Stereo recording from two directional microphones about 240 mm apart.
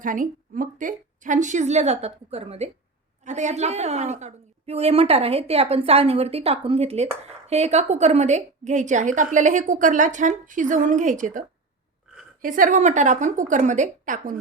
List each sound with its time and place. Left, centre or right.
0.0 s a woman's voice: right